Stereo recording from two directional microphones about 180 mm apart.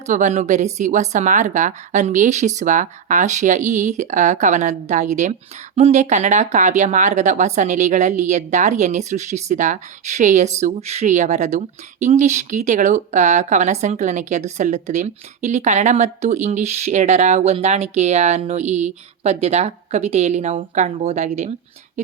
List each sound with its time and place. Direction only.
0.1 s speech: 40° right (ahead or behind)